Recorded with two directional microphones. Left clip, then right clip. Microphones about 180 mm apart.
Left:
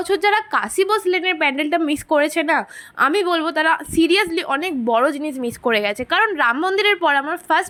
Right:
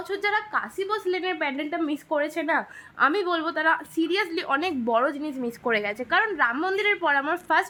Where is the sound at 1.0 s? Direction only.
20° left (ahead or behind).